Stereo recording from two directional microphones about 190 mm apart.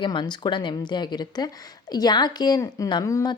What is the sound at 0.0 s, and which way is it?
A woman's voice, 25° left (ahead or behind).